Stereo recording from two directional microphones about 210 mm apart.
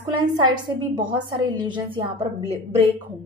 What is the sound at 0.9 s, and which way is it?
A woman's voice, 20° right (ahead or behind).